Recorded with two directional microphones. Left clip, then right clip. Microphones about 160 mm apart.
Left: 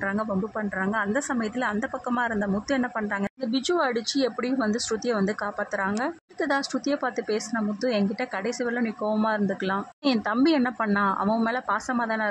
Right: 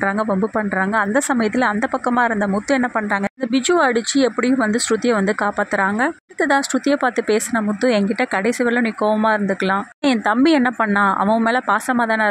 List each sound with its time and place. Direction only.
0.0 s speech: 25° right (ahead or behind)